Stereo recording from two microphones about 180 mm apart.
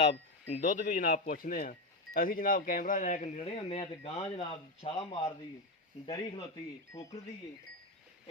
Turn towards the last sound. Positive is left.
turn(degrees=30)  # may be behind; listen again after turning